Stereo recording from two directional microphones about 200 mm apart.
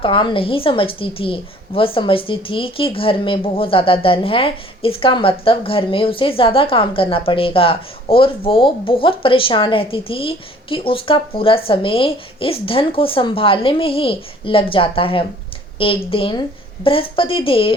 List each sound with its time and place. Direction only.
0.0 s a woman's voice: 25° left (ahead or behind)